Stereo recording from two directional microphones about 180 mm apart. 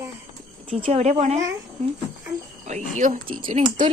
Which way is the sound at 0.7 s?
35° right (ahead or behind).